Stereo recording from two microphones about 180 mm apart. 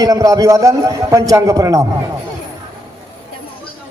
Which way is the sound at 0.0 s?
20° right (ahead or behind).